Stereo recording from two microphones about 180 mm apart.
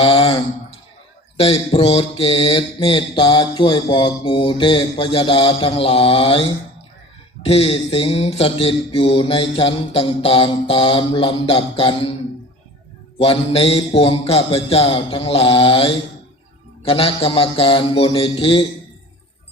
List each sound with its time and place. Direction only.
0.0 s mantra: 30° left (ahead or behind)
13.1 s mantra: 35° left (ahead or behind)